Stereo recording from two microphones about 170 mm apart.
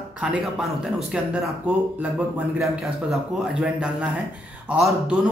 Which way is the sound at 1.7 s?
10° right (ahead or behind).